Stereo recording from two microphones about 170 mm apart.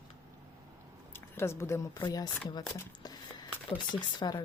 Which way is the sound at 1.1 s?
15° left (ahead or behind).